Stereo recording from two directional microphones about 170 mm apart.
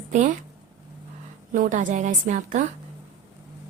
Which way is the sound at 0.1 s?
45° right (ahead or behind).